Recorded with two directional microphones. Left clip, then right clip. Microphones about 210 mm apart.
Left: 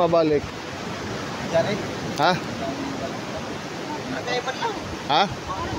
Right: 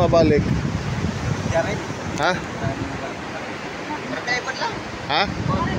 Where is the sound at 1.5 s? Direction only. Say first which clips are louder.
Even; 5° left (ahead or behind).